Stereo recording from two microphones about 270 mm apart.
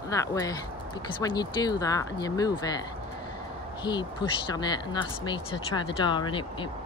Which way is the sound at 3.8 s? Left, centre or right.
Centre.